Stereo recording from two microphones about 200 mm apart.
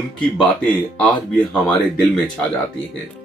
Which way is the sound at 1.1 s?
25° left (ahead or behind).